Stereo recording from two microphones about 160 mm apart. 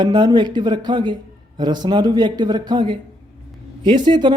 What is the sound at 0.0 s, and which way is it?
Speech, 25° right (ahead or behind).